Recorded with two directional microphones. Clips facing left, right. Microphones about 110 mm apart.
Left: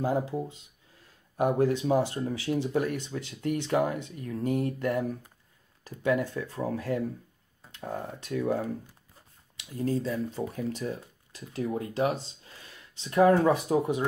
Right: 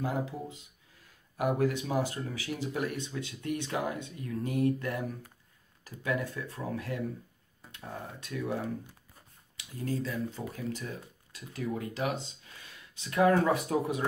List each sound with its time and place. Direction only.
0.0 s speech: 30° left (ahead or behind)
9.8 s speech: 30° left (ahead or behind)